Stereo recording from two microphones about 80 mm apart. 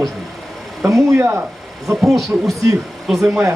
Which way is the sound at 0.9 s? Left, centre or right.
Right.